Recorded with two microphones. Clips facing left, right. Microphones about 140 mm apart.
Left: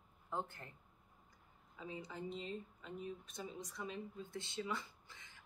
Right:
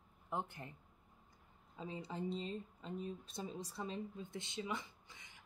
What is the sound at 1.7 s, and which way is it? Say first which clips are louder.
Speech: right 3 dB; 30° right (ahead or behind).